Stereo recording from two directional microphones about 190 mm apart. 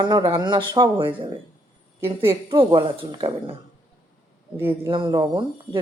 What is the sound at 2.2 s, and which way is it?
Speech, 25° right (ahead or behind).